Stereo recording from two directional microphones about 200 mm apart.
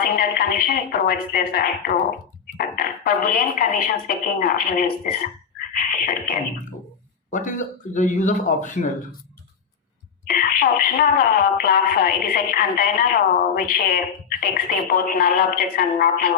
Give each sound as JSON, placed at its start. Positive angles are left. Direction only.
{"t": 0.0, "sound": "speech", "side_deg": 50}
{"t": 5.5, "sound": "a sound", "side_deg": 45}
{"t": 7.3, "sound": "a man's voice", "side_deg": 40}
{"t": 10.2, "sound": "speech", "side_deg": 45}